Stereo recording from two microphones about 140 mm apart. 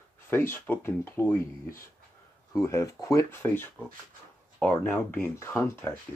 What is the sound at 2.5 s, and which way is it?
Speech, 20° left (ahead or behind).